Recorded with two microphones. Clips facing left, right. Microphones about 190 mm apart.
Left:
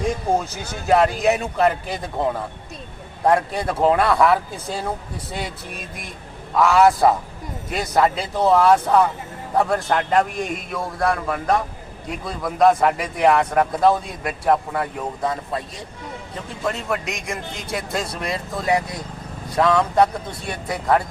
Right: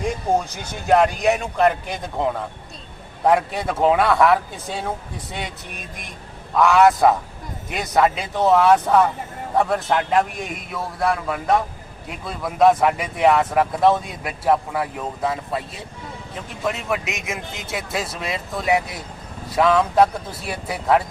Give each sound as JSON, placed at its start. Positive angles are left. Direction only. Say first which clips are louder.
{"t": 0.5, "sound": "speech", "louder": "right 1 dB", "side_deg": 0}
{"t": 6.6, "sound": "speech", "louder": "even", "side_deg": 0}
{"t": 16.6, "sound": "speech", "louder": "even", "side_deg": 0}